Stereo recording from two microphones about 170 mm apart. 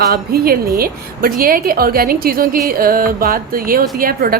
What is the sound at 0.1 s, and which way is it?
A woman's voice, 65° right (ahead or behind).